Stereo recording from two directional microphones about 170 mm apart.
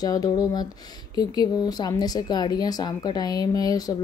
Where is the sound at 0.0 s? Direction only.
20° left (ahead or behind).